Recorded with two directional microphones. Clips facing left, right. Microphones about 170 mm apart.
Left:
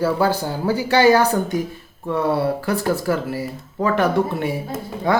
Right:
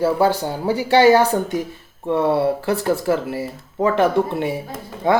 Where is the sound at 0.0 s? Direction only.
25° right (ahead or behind).